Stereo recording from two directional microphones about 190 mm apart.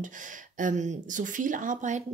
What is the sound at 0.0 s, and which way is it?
Speech, 45° right (ahead or behind).